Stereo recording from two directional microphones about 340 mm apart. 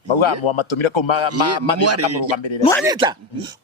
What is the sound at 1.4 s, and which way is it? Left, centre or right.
Speech, right.